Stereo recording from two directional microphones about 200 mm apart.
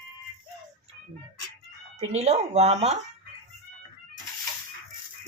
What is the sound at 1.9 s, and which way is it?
Speech, 30° right (ahead or behind).